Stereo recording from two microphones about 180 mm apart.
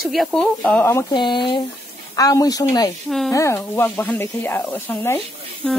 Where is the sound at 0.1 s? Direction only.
Centre (ahead or behind).